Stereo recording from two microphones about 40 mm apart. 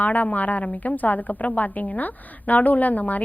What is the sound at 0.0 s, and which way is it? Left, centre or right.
A woman's voice, left.